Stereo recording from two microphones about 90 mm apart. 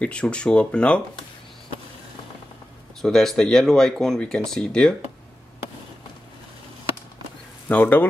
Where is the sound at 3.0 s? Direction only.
5° left (ahead or behind).